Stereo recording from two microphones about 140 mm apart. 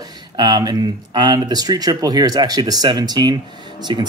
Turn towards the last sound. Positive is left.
turn(degrees=-30)  # may be behind; listen again after turning